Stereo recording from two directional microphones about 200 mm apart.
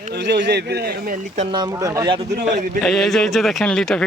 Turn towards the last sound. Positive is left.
turn(degrees=5)  # may be behind; listen again after turning